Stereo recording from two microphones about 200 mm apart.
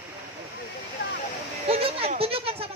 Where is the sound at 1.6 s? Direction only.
30° right (ahead or behind).